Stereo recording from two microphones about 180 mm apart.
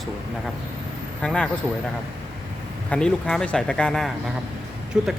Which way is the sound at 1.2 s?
5° left (ahead or behind).